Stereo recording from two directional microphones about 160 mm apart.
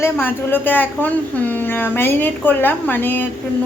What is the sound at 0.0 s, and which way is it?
A woman's voice, 10° left (ahead or behind).